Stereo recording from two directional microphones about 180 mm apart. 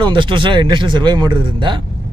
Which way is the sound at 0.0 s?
25° right (ahead or behind).